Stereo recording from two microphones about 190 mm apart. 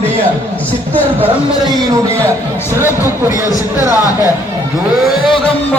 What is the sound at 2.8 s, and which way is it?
Speech, 15° left (ahead or behind).